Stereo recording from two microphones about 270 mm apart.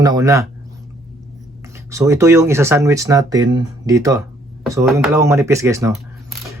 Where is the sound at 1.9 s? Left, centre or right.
Centre.